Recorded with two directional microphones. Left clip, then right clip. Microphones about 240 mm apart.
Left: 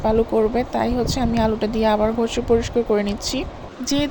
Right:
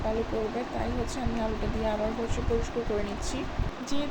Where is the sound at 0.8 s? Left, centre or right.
Left.